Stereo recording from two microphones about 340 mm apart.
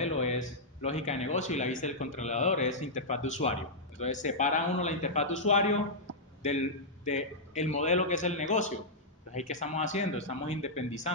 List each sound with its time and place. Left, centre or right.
0.0 s speech: centre
7.1 s speech: centre